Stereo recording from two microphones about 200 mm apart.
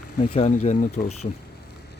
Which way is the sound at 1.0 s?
40° left (ahead or behind).